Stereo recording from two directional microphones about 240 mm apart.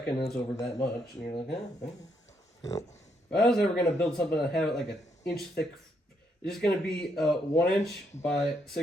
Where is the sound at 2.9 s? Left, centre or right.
Left.